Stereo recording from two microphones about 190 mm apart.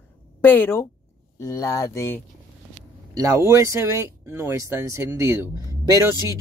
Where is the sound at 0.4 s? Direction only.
10° left (ahead or behind).